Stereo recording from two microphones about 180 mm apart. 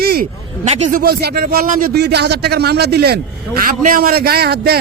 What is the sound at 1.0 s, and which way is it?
A man's voice, 60° right (ahead or behind).